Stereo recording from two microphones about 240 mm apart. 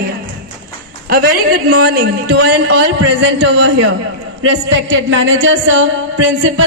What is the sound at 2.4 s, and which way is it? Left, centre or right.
A woman's voice, right.